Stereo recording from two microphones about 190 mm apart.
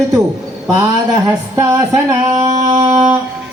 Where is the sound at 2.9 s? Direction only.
40° right (ahead or behind).